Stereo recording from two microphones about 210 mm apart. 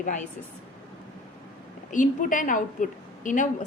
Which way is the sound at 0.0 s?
35° left (ahead or behind).